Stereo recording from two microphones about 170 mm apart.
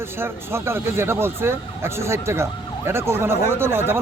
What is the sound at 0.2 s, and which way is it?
Speech, 15° right (ahead or behind).